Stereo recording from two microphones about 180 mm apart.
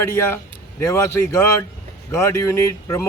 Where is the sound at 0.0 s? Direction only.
15° left (ahead or behind).